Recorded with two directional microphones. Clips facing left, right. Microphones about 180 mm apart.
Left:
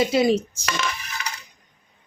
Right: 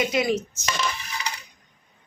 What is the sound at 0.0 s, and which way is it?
Speech, 30° left (ahead or behind).